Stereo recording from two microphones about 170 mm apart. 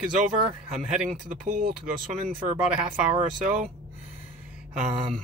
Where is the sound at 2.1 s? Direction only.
45° right (ahead or behind).